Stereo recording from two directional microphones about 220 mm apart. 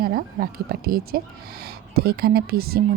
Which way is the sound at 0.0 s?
40° right (ahead or behind).